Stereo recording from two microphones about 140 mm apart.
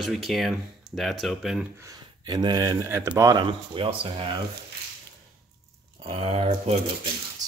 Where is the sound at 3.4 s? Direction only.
40° right (ahead or behind).